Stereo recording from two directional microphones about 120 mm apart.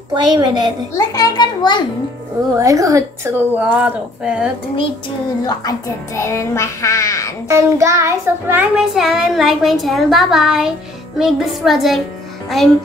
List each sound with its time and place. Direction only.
0.1 s a woman's voice: 35° right (ahead or behind)
0.9 s a child's voice: 30° left (ahead or behind)
2.5 s child singing: 25° right (ahead or behind)
3.5 s a woman's voice: 10° right (ahead or behind)
5.5 s a child's voice: 30° left (ahead or behind)
7.4 s child singing: 25° right (ahead or behind)
8.7 s a woman's voice: 5° right (ahead or behind)